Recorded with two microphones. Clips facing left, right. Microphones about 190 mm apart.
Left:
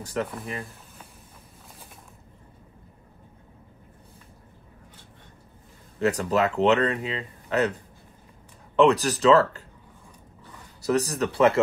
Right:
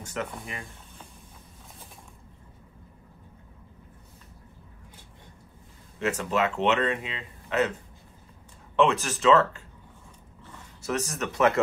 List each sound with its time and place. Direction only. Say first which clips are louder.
0.0 s speech: left 4 dB; 35° left (ahead or behind)
5.9 s speech: left 4 dB; 35° left (ahead or behind)
8.7 s speech: left 4 dB; 35° left (ahead or behind)
10.8 s speech: left 6 dB; 35° left (ahead or behind)